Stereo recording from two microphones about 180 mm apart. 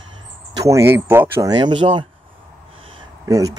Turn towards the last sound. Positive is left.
turn(degrees=-20)  # may be behind; listen again after turning